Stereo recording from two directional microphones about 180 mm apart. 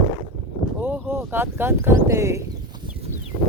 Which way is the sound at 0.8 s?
10° right (ahead or behind).